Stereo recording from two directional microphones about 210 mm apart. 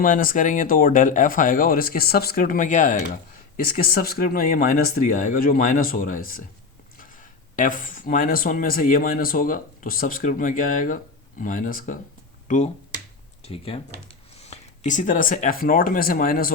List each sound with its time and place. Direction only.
0.0 s speech: 40° left (ahead or behind)
7.5 s speech: 40° left (ahead or behind)